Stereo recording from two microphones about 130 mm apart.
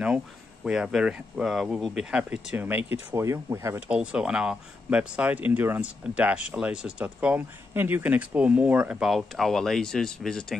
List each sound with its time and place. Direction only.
0.7 s speech: 5° right (ahead or behind); by 3.8 s 20° right (ahead or behind)
3.9 s speech: 10° right (ahead or behind)